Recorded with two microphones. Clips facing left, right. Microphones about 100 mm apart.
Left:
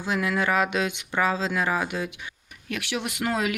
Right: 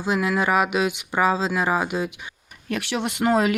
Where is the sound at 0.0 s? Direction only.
20° right (ahead or behind).